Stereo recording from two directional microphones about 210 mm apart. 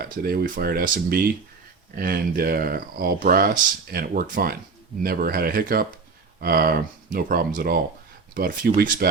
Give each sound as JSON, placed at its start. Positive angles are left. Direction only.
{"t": 0.0, "sound": "speech", "side_deg": -45}